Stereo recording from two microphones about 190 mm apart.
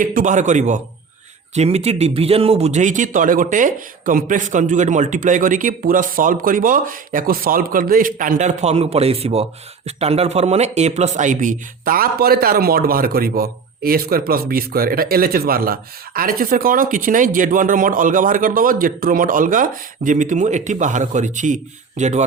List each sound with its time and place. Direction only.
0.0 s a man's voice: 45° right (ahead or behind)